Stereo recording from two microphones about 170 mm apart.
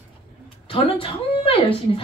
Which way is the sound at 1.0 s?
30° left (ahead or behind).